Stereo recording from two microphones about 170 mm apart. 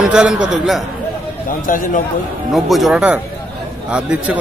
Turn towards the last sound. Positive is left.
turn(degrees=-5)  # may be behind; listen again after turning